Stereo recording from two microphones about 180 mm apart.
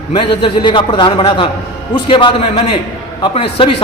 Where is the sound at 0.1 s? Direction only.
25° left (ahead or behind).